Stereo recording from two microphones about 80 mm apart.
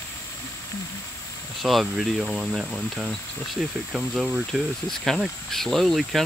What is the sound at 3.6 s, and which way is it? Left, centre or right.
Speech, centre.